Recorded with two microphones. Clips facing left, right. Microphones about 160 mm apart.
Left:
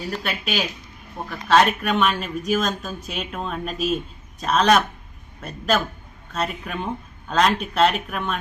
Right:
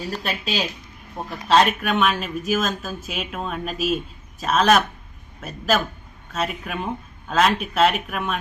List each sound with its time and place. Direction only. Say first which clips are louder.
0.2 s speech: even; 30° right (ahead or behind)
1.8 s speech: even; centre (ahead or behind)